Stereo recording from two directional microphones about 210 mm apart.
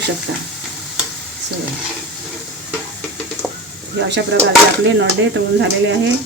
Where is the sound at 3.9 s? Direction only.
55° right (ahead or behind).